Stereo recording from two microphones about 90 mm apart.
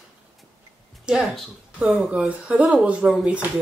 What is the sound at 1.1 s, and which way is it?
Speech, 10° right (ahead or behind).